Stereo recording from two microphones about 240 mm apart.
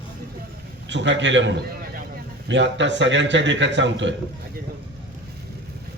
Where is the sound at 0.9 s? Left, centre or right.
Right.